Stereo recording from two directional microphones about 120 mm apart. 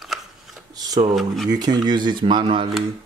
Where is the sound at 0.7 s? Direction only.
30° right (ahead or behind).